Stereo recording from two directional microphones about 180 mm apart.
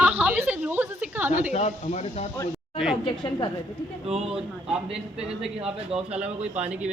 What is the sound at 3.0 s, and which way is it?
Speech, 25° left (ahead or behind).